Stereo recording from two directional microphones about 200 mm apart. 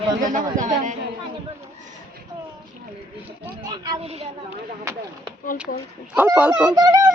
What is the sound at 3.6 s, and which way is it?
Speech, 20° right (ahead or behind).